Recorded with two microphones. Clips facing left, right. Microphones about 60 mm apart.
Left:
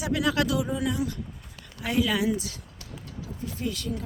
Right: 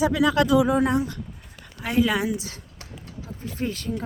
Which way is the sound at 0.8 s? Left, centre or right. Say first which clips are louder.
Right 6 dB; right.